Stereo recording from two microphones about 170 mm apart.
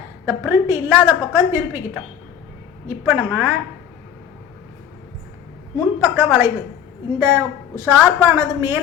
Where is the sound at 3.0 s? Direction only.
10° right (ahead or behind).